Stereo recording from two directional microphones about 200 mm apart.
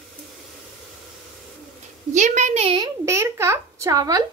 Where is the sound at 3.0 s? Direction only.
15° right (ahead or behind).